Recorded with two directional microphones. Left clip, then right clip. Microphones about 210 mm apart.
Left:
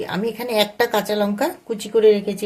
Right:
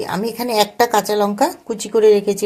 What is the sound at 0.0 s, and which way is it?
Speech, 20° right (ahead or behind).